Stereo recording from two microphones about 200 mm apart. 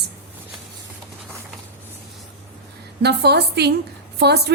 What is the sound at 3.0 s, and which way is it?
A woman's voice, 55° right (ahead or behind).